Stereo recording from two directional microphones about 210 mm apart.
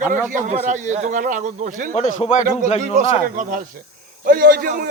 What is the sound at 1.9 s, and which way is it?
Speech, 30° left (ahead or behind).